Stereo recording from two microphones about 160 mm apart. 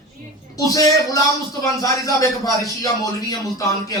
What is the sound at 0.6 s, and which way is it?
A man's voice, 20° left (ahead or behind).